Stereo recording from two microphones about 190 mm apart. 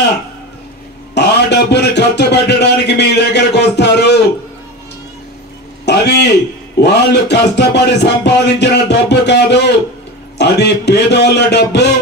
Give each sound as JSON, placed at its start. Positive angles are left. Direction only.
{"t": 1.1, "sound": "a man's voice", "side_deg": 65}
{"t": 5.9, "sound": "a man's voice", "side_deg": 60}
{"t": 6.8, "sound": "music", "side_deg": 60}